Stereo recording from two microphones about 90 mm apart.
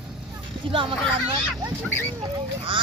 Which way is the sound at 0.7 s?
75° right (ahead or behind).